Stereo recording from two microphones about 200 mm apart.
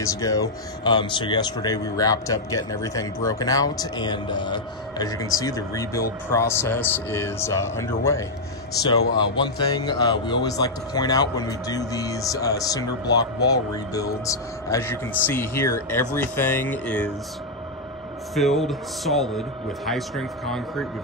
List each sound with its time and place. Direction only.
0.0 s a man's voice: 15° left (ahead or behind)
18.3 s speech: centre (ahead or behind)